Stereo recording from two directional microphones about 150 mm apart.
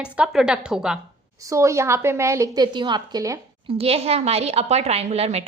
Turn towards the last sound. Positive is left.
turn(degrees=-45)  # may be behind; listen again after turning